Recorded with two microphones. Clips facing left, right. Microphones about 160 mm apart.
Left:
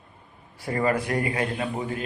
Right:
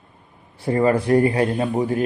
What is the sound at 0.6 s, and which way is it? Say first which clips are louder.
Mantra: right 6 dB; 30° right (ahead or behind).